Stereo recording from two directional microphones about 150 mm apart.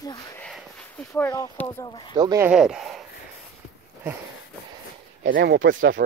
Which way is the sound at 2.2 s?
25° right (ahead or behind).